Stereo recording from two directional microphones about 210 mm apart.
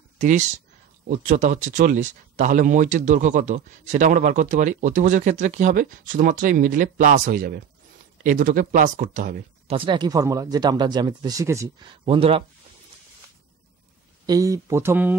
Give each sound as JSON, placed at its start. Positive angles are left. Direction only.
{"t": 0.2, "sound": "speech", "side_deg": -35}
{"t": 9.8, "sound": "speech", "side_deg": -20}
{"t": 14.2, "sound": "speech", "side_deg": -15}